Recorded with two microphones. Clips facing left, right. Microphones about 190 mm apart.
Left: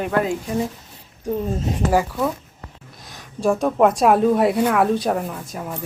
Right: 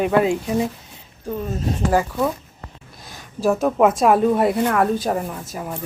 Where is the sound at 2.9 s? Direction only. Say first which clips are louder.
Right 1 dB; centre (ahead or behind).